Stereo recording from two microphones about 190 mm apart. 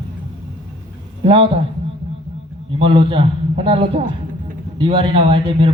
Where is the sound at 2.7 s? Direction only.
30° right (ahead or behind).